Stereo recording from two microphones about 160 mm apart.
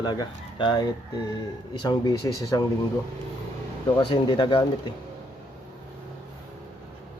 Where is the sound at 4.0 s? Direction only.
30° left (ahead or behind).